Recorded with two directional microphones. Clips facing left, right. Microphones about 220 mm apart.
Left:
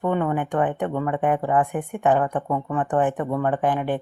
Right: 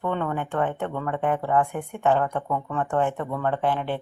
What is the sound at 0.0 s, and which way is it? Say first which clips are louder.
Speech: left 4 dB; 15° left (ahead or behind).